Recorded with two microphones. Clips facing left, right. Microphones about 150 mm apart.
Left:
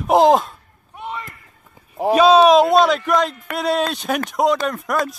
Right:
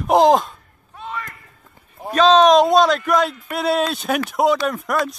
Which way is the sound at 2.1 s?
10° left (ahead or behind).